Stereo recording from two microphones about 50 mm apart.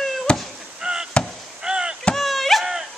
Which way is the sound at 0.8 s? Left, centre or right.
Centre.